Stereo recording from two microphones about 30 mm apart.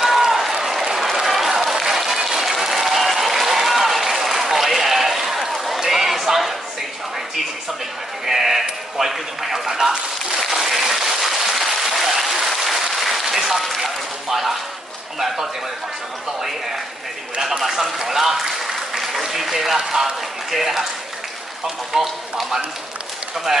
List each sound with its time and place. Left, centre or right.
0.5 s applause: centre
8.3 s a sound: centre
10.5 s applause: centre
13.8 s a sound: centre
17.4 s speech: centre
21.9 s speech: centre
23.5 s speech: centre